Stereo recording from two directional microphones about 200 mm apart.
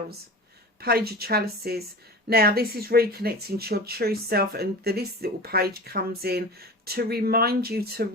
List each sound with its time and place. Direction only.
0.8 s speech: 50° right (ahead or behind)